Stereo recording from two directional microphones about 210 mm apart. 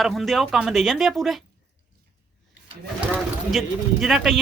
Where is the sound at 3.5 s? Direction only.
Centre (ahead or behind).